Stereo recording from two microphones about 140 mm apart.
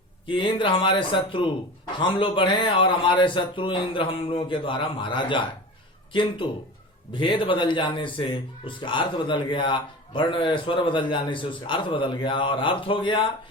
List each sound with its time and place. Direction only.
0.3 s a man's voice: 35° left (ahead or behind)
7.1 s a man's voice: 35° left (ahead or behind)